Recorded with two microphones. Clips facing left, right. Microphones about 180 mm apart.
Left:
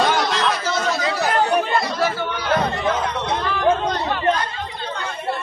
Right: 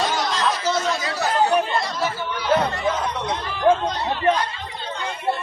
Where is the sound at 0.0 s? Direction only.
65° left (ahead or behind).